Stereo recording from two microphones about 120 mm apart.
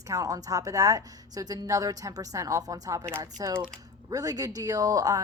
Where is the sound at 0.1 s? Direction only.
30° right (ahead or behind).